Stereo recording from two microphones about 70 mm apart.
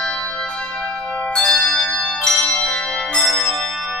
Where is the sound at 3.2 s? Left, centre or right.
Centre.